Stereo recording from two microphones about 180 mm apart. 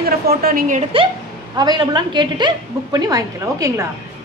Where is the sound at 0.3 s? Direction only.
55° right (ahead or behind).